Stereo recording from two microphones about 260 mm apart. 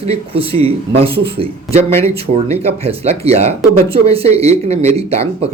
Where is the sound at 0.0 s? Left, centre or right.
Right.